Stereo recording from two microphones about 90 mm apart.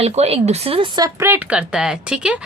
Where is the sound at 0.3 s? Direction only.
90° right.